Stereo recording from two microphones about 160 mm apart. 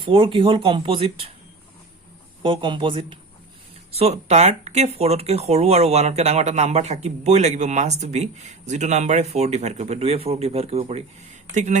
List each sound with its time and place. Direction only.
0.0 s speech: 35° right (ahead or behind)
2.4 s speech: 30° right (ahead or behind); by 11.8 s 50° right (ahead or behind)